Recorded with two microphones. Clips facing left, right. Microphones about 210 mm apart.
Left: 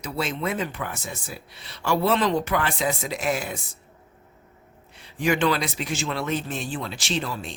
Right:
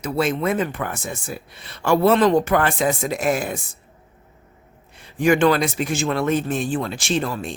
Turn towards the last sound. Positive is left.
turn(degrees=-50)  # may be behind; listen again after turning